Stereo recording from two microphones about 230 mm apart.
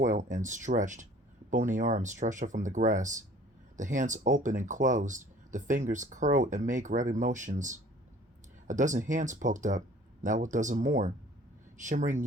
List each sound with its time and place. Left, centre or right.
0.0 s speech: right